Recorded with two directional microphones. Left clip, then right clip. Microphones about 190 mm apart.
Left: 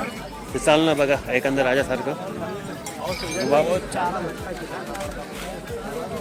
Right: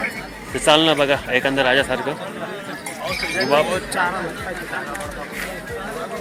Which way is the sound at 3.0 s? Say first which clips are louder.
Right 5 dB; 60° left (ahead or behind).